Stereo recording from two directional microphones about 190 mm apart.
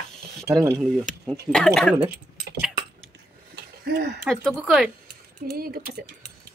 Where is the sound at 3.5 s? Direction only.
55° right (ahead or behind).